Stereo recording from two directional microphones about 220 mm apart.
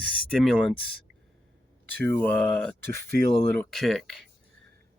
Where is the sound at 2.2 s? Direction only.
5° left (ahead or behind).